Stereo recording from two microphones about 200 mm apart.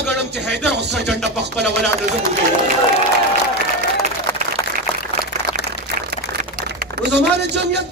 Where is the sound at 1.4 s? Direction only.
55° right (ahead or behind).